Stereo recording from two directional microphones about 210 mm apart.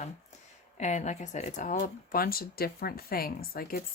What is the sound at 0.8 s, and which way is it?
Speech, 35° left (ahead or behind).